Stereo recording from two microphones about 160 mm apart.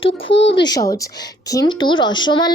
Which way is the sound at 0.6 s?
25° left (ahead or behind).